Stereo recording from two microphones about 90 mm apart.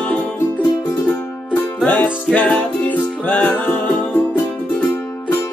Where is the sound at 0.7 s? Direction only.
30° left (ahead or behind).